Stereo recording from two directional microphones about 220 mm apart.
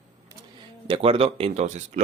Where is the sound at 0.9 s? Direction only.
25° right (ahead or behind).